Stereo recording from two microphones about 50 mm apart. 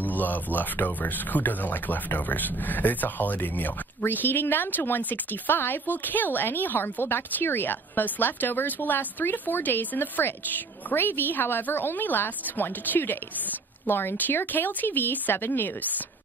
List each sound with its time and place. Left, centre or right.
0.0 s a woman's voice: left